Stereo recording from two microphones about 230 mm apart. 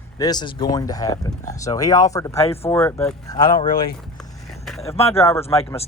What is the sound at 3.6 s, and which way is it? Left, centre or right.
Speech, left.